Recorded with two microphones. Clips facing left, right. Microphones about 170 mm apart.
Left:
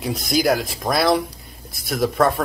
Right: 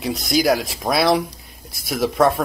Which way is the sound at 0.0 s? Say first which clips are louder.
Right 1 dB; centre (ahead or behind).